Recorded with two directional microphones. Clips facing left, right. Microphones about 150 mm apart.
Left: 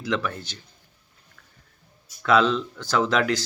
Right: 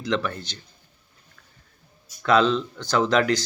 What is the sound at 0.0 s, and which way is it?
Speech, 5° left (ahead or behind).